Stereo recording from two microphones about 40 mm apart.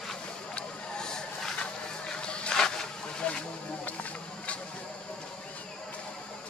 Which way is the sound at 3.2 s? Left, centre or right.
Left.